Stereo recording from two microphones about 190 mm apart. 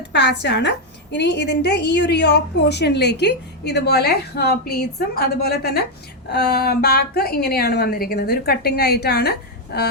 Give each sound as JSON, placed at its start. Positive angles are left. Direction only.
{"t": 0.1, "sound": "a woman's voice", "side_deg": 65}